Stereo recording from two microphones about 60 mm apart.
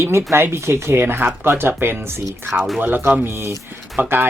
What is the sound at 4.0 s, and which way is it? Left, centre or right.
Speech, right.